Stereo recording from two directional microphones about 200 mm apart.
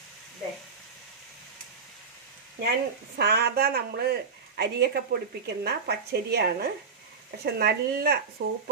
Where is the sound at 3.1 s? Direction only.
55° right (ahead or behind).